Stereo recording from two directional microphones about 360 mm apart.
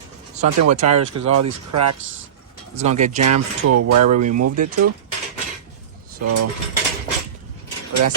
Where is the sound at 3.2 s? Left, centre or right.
Right.